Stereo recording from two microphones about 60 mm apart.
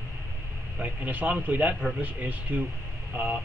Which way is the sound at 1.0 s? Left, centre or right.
Right.